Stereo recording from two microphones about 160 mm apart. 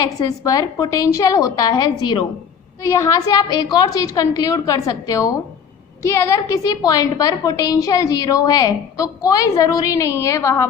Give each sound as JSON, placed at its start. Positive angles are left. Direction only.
{"t": 0.0, "sound": "a woman's voice", "side_deg": 20}